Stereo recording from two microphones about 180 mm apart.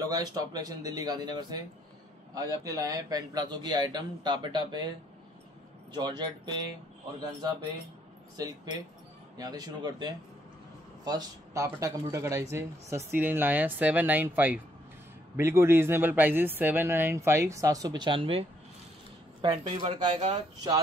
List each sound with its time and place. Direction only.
0.1 s a man's voice: 20° right (ahead or behind)
5.9 s a man's voice: 25° right (ahead or behind)
8.4 s a man's voice: 20° right (ahead or behind)
19.4 s speech: 25° right (ahead or behind)